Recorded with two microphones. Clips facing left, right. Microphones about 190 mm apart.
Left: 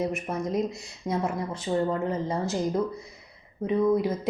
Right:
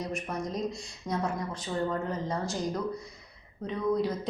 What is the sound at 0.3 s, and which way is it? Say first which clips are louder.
A woman's voice: left 5 dB; 25° left (ahead or behind).